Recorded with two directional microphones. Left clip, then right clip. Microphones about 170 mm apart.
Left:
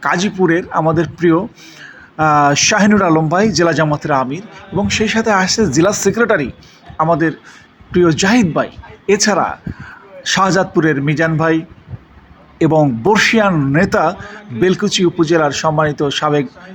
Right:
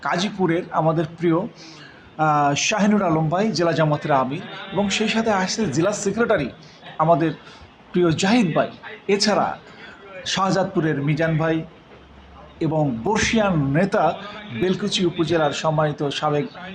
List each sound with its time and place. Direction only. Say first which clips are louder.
0.0 s a man's voice: left 7 dB; 30° left (ahead or behind)
12.5 s a man's voice: left 10 dB; 40° left (ahead or behind)